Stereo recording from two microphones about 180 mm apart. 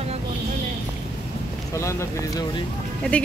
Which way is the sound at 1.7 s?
15° left (ahead or behind).